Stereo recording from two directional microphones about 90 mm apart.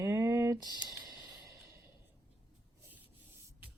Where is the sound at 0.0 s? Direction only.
35° right (ahead or behind).